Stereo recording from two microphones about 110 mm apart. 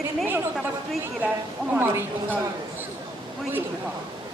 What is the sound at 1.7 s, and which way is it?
Speech, 20° right (ahead or behind).